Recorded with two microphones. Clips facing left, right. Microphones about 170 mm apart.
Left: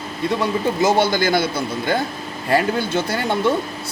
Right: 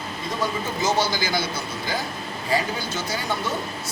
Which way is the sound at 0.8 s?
55° left (ahead or behind).